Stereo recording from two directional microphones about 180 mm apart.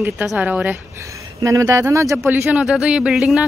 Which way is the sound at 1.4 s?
20° right (ahead or behind).